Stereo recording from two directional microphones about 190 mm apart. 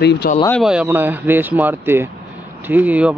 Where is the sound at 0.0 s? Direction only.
60° left (ahead or behind).